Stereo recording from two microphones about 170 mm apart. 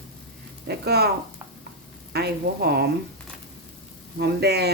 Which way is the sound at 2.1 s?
70° right (ahead or behind).